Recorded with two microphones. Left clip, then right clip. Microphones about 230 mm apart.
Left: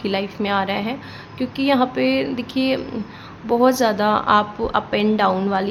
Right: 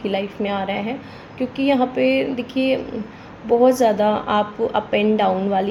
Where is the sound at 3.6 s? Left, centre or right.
Centre.